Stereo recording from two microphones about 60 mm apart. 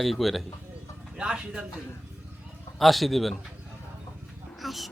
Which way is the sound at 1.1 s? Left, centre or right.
Centre.